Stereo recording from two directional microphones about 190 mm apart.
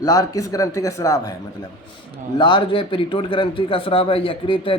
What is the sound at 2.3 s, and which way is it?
A man's voice, 25° left (ahead or behind).